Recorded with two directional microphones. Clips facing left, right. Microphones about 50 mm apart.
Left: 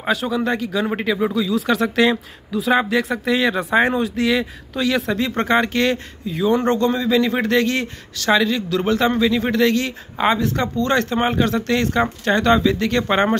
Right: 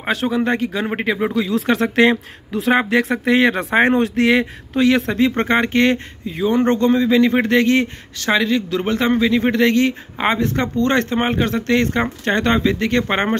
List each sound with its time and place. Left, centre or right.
0.0 s speech: right